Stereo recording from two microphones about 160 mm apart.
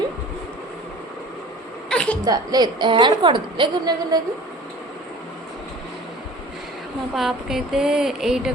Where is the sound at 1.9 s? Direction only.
5° left (ahead or behind).